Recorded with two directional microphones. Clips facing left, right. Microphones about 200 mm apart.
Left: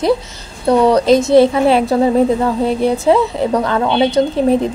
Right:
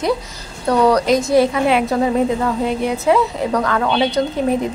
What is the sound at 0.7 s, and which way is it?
A woman's voice, 25° left (ahead or behind).